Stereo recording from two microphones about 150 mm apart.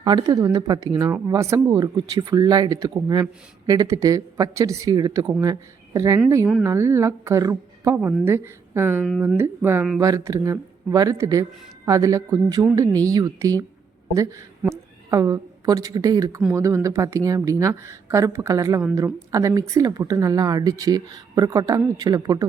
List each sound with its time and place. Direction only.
0.0 s a woman's voice: 30° right (ahead or behind)